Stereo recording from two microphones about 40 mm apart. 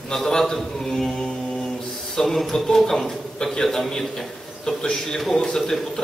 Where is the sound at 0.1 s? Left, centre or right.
Centre.